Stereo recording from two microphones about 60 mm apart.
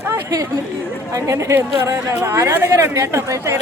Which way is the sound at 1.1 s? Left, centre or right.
Right.